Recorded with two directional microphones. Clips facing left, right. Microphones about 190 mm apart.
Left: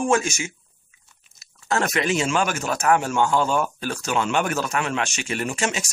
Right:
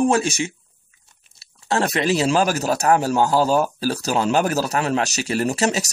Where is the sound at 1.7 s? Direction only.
35° right (ahead or behind).